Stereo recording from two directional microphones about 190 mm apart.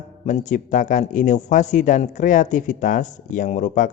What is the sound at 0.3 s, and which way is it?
A man's voice, 40° left (ahead or behind).